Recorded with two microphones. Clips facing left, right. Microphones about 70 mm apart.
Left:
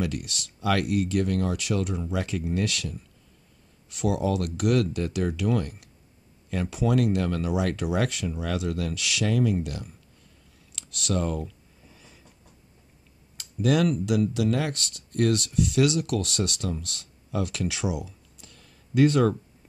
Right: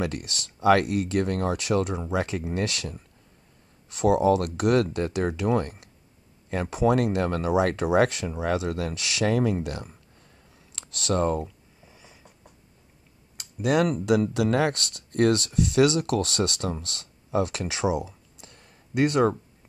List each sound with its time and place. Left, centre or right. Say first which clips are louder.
0.0 s speech: even; right
11.4 s a sound: left 1 dB; centre
13.4 s speech: even; right
14.3 s speech: right 3 dB; right